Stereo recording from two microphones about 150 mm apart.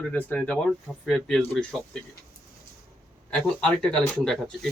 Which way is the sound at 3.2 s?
5° left (ahead or behind).